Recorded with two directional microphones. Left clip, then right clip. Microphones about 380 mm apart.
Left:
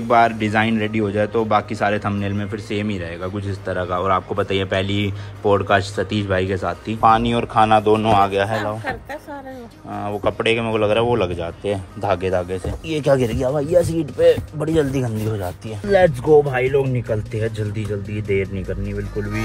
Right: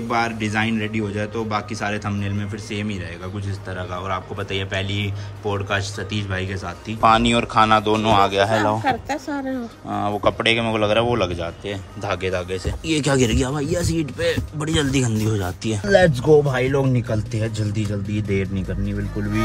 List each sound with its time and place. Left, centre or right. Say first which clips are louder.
0.1 s a man's voice: left 7 dB; centre
8.8 s a woman's voice: right 5 dB; centre
9.9 s a man's voice: right 1 dB; centre
18.9 s a man's voice: right 2 dB; centre